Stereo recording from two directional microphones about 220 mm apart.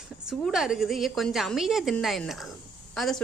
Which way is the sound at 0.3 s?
Centre (ahead or behind).